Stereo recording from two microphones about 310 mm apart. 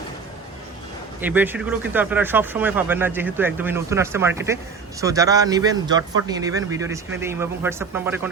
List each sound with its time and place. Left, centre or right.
1.2 s speech: centre